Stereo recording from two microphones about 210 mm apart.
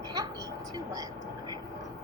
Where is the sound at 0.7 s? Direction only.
15° right (ahead or behind).